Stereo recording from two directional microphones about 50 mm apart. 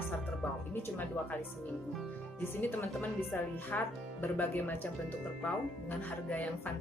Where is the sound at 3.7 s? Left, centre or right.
Left.